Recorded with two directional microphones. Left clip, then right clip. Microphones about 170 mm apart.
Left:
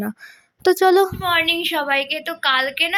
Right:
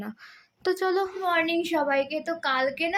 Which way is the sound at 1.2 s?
10° right (ahead or behind).